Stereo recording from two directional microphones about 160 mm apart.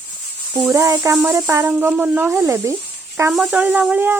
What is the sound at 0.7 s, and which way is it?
Speech, 20° right (ahead or behind).